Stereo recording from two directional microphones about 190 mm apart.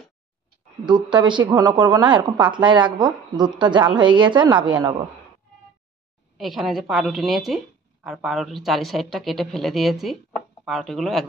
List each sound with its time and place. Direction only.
0.8 s speech: 25° right (ahead or behind)
6.3 s a woman's voice: centre (ahead or behind)